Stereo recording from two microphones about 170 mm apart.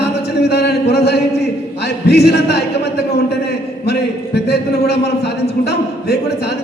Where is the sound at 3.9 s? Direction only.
75° left (ahead or behind).